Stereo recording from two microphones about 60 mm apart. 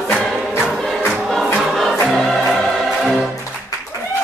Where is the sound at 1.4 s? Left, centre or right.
Centre.